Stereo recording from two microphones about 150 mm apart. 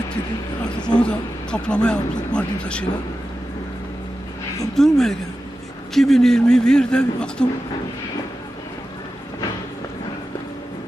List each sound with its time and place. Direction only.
0.8 s a man's voice: 5° left (ahead or behind)
4.7 s a man's voice: centre (ahead or behind)